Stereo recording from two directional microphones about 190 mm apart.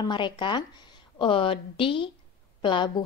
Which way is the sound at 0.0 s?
25° left (ahead or behind).